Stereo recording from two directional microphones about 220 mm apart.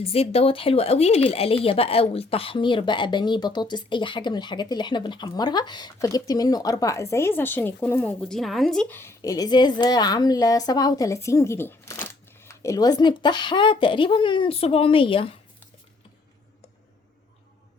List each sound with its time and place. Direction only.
0.0 s speech: 25° left (ahead or behind)